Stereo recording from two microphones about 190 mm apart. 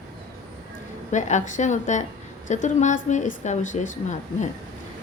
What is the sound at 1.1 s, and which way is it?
A woman's voice, 40° left (ahead or behind).